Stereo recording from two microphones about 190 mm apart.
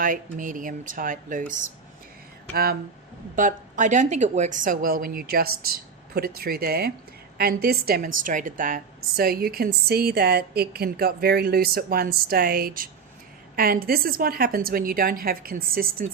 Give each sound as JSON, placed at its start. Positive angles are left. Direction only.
{"t": 0.0, "sound": "a woman's voice", "side_deg": -45}
{"t": 3.3, "sound": "a woman's voice", "side_deg": -40}